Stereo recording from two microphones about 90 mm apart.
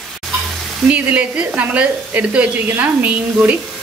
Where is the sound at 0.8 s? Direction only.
15° right (ahead or behind).